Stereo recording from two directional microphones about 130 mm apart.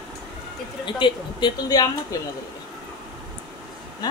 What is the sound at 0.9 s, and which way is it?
A woman's voice, 40° left (ahead or behind).